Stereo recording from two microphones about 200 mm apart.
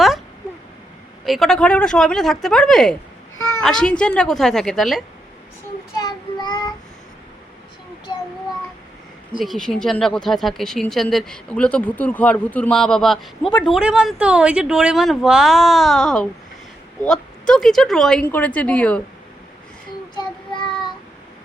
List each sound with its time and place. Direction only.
1.2 s speech: centre (ahead or behind)
6.0 s child singing: 20° left (ahead or behind)
8.1 s child singing: 20° left (ahead or behind)
9.4 s speech: centre (ahead or behind)
20.1 s child singing: 25° left (ahead or behind)